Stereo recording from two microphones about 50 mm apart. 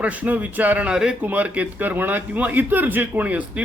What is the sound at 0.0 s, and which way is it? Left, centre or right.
Speech, right.